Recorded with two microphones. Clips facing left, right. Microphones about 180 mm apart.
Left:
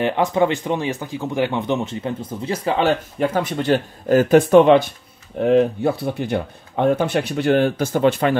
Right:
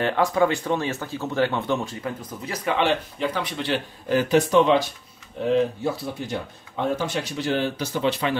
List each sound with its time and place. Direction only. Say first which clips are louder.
0.0 s speech: left 3 dB; 20° left (ahead or behind); by 8.4 s 50° left (ahead or behind)